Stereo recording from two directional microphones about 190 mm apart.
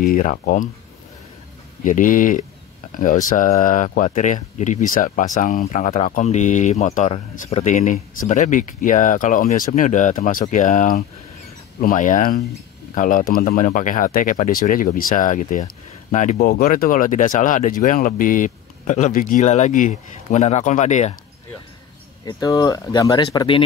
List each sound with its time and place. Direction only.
0.0 s speech: 40° left (ahead or behind)
1.9 s speech: 45° left (ahead or behind)
22.2 s speech: 20° left (ahead or behind)